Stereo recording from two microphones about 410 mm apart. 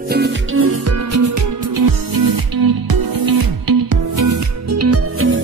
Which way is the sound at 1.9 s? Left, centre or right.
Right.